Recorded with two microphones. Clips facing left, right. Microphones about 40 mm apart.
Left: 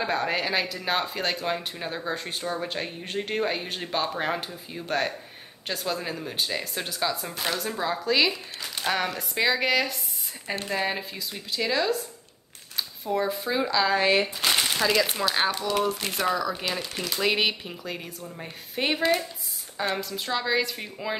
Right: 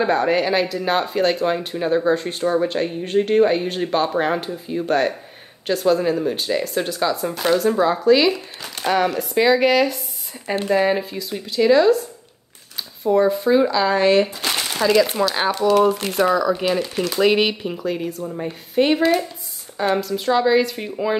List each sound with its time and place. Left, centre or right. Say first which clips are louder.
0.0 s speech: right 8 dB; centre
2.4 s speech: right 12 dB; centre
2.7 s speech: right 11 dB; centre
8.3 s speech: right 9 dB; centre
10.4 s speech: right 10 dB; centre
14.4 s crumpling: right 1 dB; centre
14.7 s speech: right 7 dB; centre